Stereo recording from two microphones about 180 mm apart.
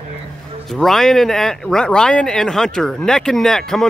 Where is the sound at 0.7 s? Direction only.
Centre (ahead or behind).